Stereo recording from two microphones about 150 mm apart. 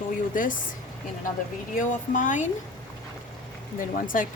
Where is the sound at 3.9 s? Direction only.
65° left (ahead or behind).